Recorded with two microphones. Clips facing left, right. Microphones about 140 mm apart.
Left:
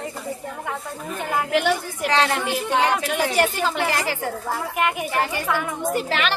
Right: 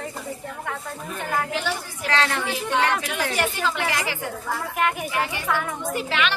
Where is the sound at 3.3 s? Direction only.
40° left (ahead or behind).